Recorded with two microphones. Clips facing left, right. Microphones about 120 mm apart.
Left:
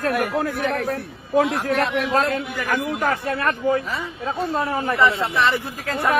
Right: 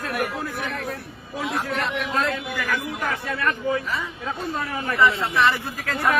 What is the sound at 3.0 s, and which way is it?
Speech, 55° left (ahead or behind).